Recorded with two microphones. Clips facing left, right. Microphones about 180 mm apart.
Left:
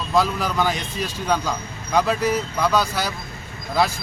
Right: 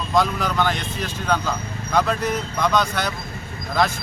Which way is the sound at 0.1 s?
10° left (ahead or behind).